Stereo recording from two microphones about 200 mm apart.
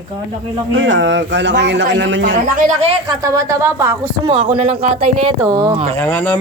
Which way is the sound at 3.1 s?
15° right (ahead or behind).